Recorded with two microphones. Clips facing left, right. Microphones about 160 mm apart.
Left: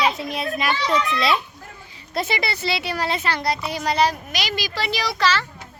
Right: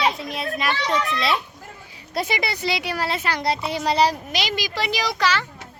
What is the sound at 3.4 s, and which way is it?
A child's voice, 25° right (ahead or behind).